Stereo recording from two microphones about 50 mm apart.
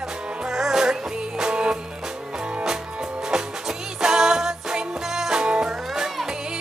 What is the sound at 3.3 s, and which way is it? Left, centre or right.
Music, centre.